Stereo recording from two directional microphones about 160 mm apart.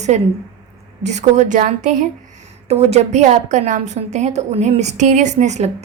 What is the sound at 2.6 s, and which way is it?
A woman's voice, 40° right (ahead or behind).